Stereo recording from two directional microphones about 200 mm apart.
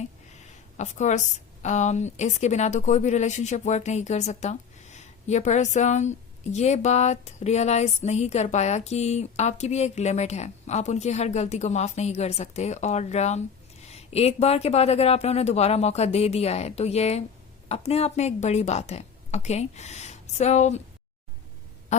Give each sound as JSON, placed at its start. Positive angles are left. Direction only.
{"t": 0.8, "sound": "a woman's voice", "side_deg": 35}